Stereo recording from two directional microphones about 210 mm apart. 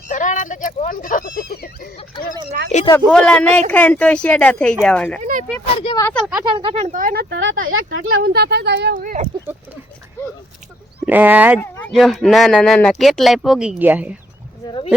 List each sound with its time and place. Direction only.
0.1 s speech: 35° left (ahead or behind)
2.7 s speech: 35° left (ahead or behind)
3.1 s speech: 5° left (ahead or behind)
5.2 s speech: 35° right (ahead or behind)
5.5 s speech: 20° left (ahead or behind)
6.1 s speech: 5° left (ahead or behind)
6.4 s speech: 25° right (ahead or behind); by 8.0 s 75° right (ahead or behind)
8.2 s speech: 50° right (ahead or behind)
9.0 s speech: 40° right (ahead or behind)
11.0 s speech: 10° right (ahead or behind)
11.6 s speech: 5° left (ahead or behind)